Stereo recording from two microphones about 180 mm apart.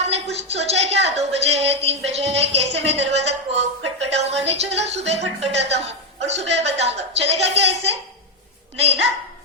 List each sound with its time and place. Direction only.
0.0 s a woman's voice: 35° right (ahead or behind)